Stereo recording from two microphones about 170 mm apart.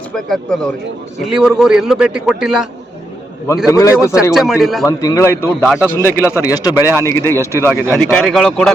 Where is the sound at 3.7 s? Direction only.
20° left (ahead or behind).